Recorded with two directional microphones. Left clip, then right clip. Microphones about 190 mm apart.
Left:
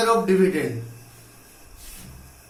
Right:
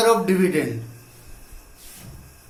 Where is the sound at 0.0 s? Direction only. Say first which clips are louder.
Right 1 dB; 40° right (ahead or behind).